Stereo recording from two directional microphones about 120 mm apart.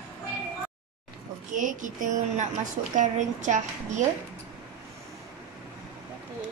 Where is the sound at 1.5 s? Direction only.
90° right.